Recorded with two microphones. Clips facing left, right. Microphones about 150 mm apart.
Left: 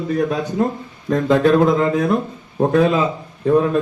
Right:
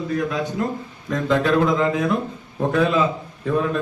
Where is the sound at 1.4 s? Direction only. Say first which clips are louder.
Left 4 dB; 40° left (ahead or behind).